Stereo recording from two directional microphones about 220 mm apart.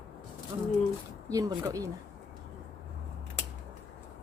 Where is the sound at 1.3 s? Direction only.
15° right (ahead or behind).